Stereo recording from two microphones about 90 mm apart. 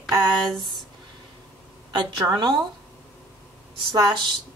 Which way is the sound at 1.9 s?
50° right (ahead or behind).